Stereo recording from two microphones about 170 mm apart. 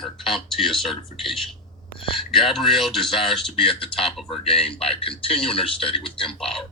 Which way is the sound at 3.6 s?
30° left (ahead or behind).